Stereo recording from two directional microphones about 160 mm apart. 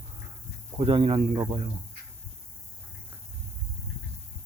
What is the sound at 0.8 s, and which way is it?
Speech, 35° right (ahead or behind).